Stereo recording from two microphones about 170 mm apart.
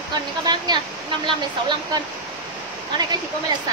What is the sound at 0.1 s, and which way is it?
Speech, 25° right (ahead or behind).